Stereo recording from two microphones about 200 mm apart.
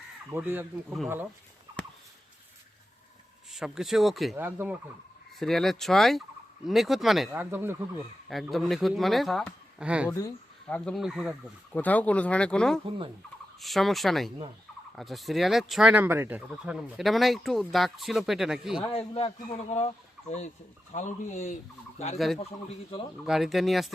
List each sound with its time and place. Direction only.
0.3 s speech: 10° right (ahead or behind)
3.5 s speech: centre (ahead or behind)
5.4 s speech: centre (ahead or behind)
7.5 s speech: 10° right (ahead or behind)
8.3 s speech: centre (ahead or behind)
10.1 s speech: 15° left (ahead or behind); by 11.3 s 5° right (ahead or behind)
11.7 s speech: 10° left (ahead or behind)
18.8 s a man's voice: 30° left (ahead or behind)
20.9 s fowl: 35° left (ahead or behind)
22.4 s a man's voice: 30° left (ahead or behind)
23.2 s speech: centre (ahead or behind)